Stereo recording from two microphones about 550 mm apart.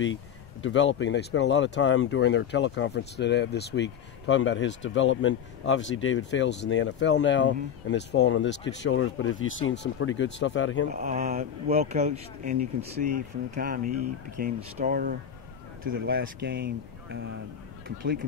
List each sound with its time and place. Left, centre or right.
0.0 s speech: centre
10.9 s speech: centre